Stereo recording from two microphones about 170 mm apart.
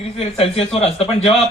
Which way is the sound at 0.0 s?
35° left (ahead or behind).